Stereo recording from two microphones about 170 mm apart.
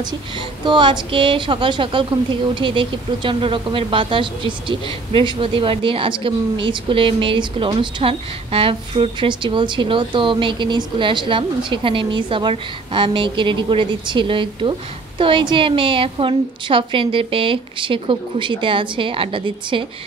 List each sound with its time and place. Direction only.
0.0 s a woman's voice: 30° right (ahead or behind)